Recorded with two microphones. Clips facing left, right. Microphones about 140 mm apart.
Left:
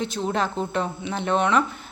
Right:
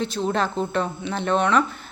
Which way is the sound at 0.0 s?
15° left (ahead or behind).